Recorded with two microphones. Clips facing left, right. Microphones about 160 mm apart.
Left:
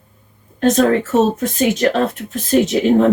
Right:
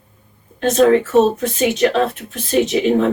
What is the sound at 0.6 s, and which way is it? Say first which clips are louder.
Speech: right 1 dB; 45° left (ahead or behind).